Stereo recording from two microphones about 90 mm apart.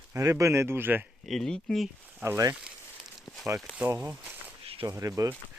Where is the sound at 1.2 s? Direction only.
5° left (ahead or behind).